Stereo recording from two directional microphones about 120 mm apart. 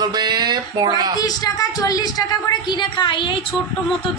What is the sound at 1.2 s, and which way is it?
A woman's voice, 30° left (ahead or behind).